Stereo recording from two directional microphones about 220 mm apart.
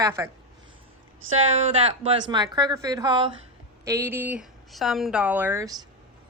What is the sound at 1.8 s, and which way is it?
A woman's voice, 20° right (ahead or behind).